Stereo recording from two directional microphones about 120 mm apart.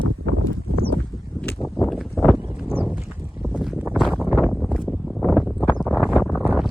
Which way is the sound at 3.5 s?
10° right (ahead or behind).